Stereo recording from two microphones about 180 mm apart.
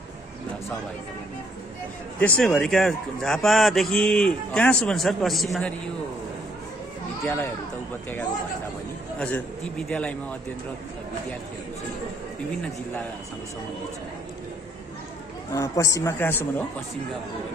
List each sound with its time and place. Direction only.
2.1 s a man's voice: 5° left (ahead or behind)
9.2 s speech: 5° left (ahead or behind)
15.5 s speech: 15° left (ahead or behind)